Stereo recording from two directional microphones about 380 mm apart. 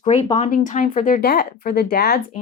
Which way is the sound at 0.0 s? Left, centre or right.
Centre.